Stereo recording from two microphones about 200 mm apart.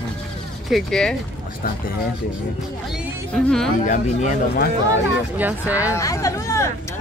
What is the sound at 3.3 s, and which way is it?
Speech, centre (ahead or behind).